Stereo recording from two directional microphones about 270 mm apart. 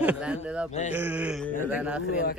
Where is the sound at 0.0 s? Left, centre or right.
Centre.